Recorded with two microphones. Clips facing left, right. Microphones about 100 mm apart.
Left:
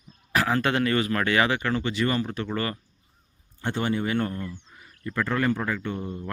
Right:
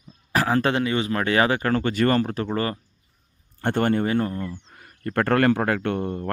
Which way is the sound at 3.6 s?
55° right (ahead or behind).